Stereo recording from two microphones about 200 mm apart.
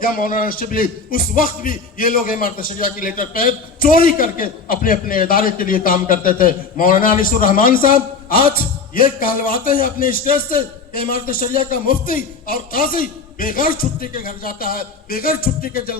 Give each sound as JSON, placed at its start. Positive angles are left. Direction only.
{"t": 0.0, "sound": "music", "side_deg": 45}